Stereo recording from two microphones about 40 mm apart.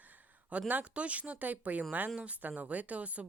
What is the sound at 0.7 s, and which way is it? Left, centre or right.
Speech, right.